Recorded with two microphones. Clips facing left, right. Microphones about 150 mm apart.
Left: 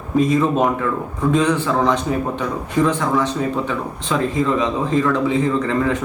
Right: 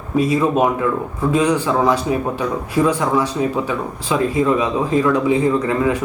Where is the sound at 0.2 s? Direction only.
10° right (ahead or behind).